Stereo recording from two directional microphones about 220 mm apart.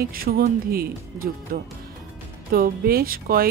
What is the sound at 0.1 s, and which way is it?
Speech, 40° right (ahead or behind).